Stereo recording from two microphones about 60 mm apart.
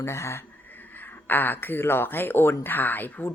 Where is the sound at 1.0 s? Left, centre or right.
Left.